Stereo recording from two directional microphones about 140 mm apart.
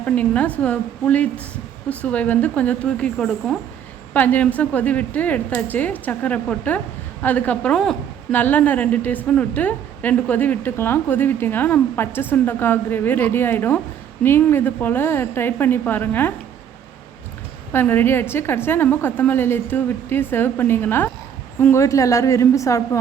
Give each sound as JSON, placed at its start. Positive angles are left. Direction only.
{"t": 0.0, "sound": "a woman's voice", "side_deg": 10}
{"t": 17.7, "sound": "a woman's voice", "side_deg": 15}